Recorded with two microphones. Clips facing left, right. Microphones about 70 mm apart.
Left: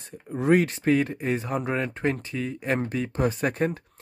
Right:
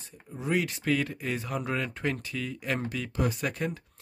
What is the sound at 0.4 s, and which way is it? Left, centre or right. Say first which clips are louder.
Speech: left 8 dB; left.